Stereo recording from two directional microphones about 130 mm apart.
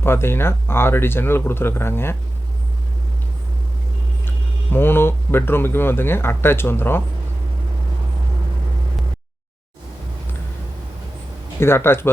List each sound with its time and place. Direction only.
0.0 s speech: 20° left (ahead or behind)
4.3 s speech: 15° left (ahead or behind)
11.6 s speech: 20° left (ahead or behind)